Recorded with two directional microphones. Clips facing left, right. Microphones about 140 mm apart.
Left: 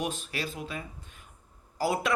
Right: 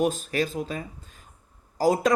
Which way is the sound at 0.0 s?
40° right (ahead or behind).